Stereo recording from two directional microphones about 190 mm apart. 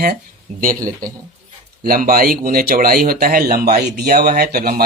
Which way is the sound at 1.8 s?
50° right (ahead or behind).